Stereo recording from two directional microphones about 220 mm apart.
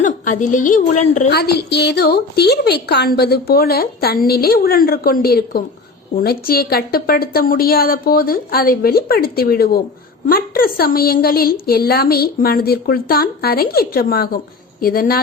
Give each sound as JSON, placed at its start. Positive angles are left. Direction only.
{"t": 0.0, "sound": "a woman's voice", "side_deg": 35}
{"t": 1.3, "sound": "a woman's voice", "side_deg": 45}